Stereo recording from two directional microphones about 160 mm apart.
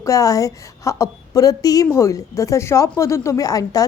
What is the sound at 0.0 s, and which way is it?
Speech, 20° left (ahead or behind).